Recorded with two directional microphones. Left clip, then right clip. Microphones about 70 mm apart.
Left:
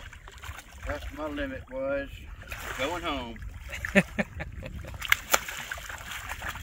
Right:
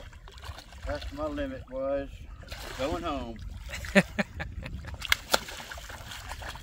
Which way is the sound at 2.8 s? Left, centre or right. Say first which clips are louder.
Even; left.